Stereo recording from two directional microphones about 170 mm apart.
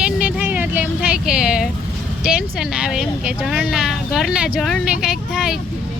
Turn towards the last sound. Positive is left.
turn(degrees=-5)  # may be behind; listen again after turning